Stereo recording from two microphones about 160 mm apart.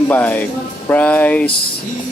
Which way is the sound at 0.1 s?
10° left (ahead or behind).